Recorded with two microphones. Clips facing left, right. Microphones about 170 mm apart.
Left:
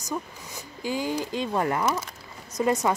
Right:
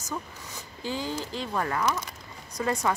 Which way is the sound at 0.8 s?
10° left (ahead or behind).